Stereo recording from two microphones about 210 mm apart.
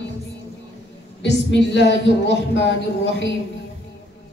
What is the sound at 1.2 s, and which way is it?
Speech, 55° left (ahead or behind).